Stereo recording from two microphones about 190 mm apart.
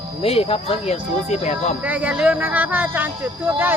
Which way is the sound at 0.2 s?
30° left (ahead or behind).